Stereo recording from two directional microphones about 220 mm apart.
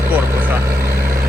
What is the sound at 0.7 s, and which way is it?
Speech, 45° right (ahead or behind).